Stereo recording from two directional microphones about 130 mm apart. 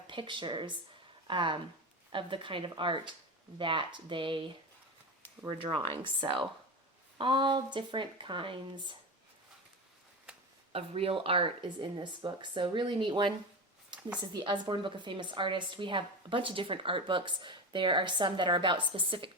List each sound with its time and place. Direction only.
0.1 s a woman's voice: 40° right (ahead or behind)
10.3 s a sound: 5° right (ahead or behind)
10.7 s a woman's voice: 45° right (ahead or behind)